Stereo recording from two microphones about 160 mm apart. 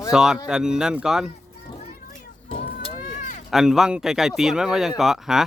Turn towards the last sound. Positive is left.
turn(degrees=-5)  # may be behind; listen again after turning